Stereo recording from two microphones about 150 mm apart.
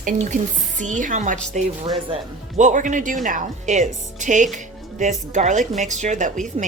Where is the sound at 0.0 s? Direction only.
55° right (ahead or behind).